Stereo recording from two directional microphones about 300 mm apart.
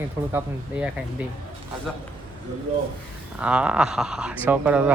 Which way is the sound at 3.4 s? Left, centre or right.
Centre.